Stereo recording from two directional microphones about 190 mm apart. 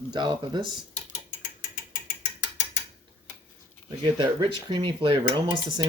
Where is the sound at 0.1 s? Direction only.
25° right (ahead or behind).